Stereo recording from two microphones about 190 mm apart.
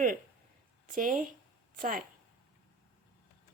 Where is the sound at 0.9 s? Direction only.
45° right (ahead or behind).